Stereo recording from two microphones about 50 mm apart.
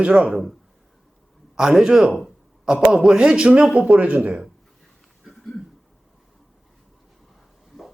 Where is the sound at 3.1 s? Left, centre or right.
Centre.